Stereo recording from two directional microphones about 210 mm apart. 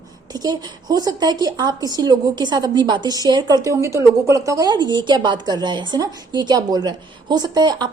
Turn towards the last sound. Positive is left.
turn(degrees=-20)  # may be behind; listen again after turning